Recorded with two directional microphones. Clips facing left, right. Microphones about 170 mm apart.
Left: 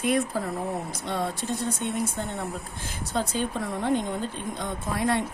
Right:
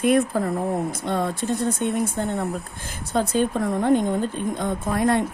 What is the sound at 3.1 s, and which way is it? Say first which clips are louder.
Speech: right 7 dB; 50° right (ahead or behind).